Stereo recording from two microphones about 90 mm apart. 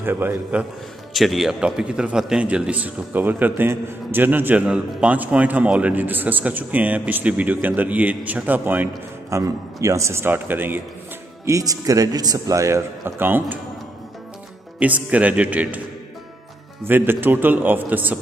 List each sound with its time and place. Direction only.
0.0 s a man's voice: 25° right (ahead or behind)
1.1 s a man's voice: centre (ahead or behind); by 8.9 s 20° right (ahead or behind)
9.3 s a man's voice: 35° right (ahead or behind); by 10.8 s 20° right (ahead or behind)
11.4 s a man's voice: 40° right (ahead or behind); by 13.6 s 25° right (ahead or behind)
14.8 s a man's voice: 15° right (ahead or behind)
16.8 s a man's voice: 25° right (ahead or behind)